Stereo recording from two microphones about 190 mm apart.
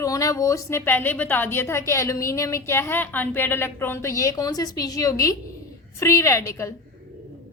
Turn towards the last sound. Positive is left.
turn(degrees=15)  # may be behind; listen again after turning